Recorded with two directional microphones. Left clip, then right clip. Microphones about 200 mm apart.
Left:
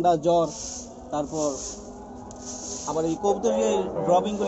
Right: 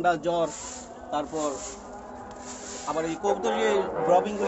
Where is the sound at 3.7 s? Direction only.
30° right (ahead or behind).